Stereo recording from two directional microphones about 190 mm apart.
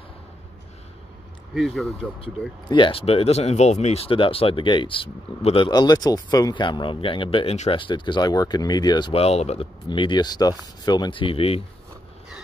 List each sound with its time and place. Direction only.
1.5 s speech: centre (ahead or behind)
2.1 s speech: 25° left (ahead or behind)